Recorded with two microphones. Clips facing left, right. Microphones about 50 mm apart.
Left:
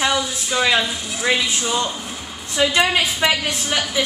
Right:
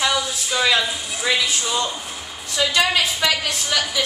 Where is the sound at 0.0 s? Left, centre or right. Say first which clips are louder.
Left 1 dB; centre.